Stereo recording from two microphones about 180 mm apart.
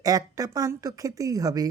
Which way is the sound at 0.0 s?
20° right (ahead or behind).